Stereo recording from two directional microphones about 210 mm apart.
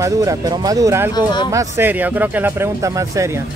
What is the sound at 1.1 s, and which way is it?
Speech, 20° left (ahead or behind).